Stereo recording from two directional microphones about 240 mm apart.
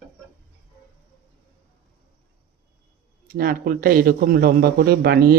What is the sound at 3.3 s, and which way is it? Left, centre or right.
A man's voice, right.